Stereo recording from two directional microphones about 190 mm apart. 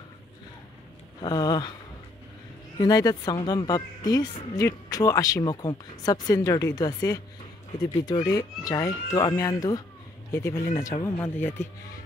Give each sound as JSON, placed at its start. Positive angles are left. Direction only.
{"t": 1.2, "sound": "speech", "side_deg": 20}
{"t": 2.8, "sound": "speech", "side_deg": 20}